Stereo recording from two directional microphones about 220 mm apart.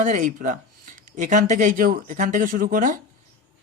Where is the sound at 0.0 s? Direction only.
35° right (ahead or behind).